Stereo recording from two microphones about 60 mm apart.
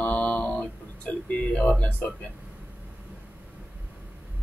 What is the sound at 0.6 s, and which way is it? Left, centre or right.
Music, centre.